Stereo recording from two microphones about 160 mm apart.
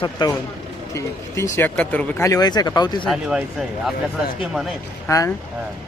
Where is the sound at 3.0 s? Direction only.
Centre (ahead or behind).